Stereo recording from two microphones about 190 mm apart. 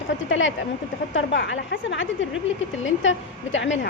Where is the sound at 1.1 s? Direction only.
75° left (ahead or behind).